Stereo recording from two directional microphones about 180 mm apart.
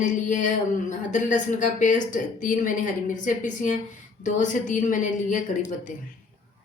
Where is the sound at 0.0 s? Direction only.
45° left (ahead or behind).